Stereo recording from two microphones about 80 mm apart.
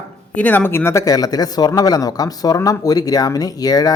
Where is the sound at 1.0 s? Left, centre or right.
Left.